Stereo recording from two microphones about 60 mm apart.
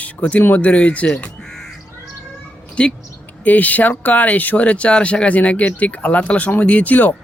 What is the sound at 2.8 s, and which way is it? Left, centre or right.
Speech, centre.